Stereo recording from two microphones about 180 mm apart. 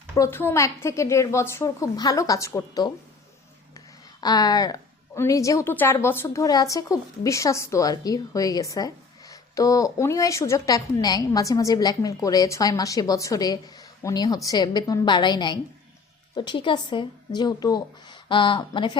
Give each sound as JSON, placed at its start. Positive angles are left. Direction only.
{"t": 0.2, "sound": "a woman's voice", "side_deg": 10}